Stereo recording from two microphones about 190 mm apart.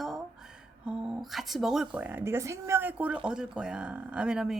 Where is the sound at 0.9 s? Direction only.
5° right (ahead or behind).